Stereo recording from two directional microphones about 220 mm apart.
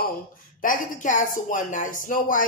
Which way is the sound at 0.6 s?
35° left (ahead or behind).